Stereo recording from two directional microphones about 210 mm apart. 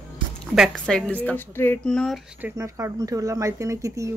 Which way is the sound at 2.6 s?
15° right (ahead or behind).